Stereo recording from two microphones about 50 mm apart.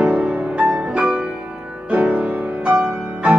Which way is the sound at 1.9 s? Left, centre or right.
Right.